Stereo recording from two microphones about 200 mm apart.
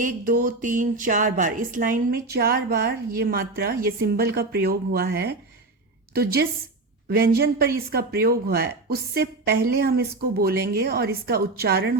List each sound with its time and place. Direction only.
0.0 s speech: 45° right (ahead or behind)